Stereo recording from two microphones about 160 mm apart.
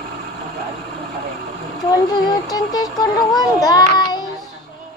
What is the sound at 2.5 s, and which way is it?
A child's voice, 25° left (ahead or behind).